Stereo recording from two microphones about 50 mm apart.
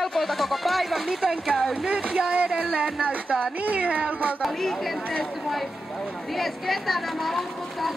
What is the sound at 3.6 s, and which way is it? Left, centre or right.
Speech, right.